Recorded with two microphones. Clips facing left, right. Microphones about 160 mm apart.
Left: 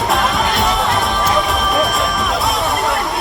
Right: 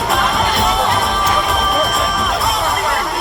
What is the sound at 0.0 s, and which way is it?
Music, centre (ahead or behind).